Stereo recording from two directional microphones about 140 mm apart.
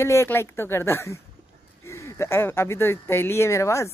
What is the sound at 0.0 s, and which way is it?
Speech, 20° left (ahead or behind).